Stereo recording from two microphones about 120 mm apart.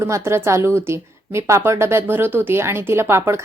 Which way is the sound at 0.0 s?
25° right (ahead or behind).